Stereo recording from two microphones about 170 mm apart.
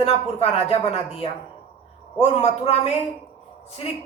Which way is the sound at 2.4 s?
40° left (ahead or behind).